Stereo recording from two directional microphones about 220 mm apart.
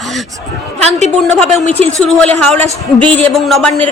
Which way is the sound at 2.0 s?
5° left (ahead or behind).